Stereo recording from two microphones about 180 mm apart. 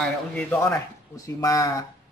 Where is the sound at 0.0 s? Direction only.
5° left (ahead or behind).